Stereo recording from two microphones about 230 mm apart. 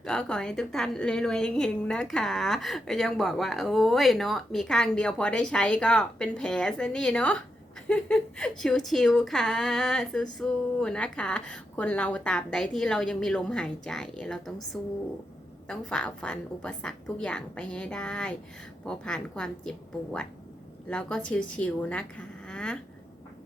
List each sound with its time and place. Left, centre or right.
0.0 s a woman's voice: centre
20.9 s a woman's voice: centre